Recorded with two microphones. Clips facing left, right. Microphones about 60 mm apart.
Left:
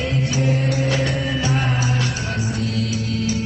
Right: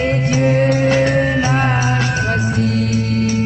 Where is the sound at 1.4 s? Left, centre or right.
Right.